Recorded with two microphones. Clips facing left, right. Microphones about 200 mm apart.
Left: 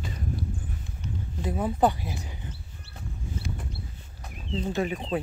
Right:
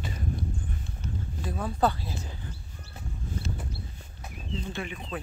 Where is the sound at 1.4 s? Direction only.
20° left (ahead or behind).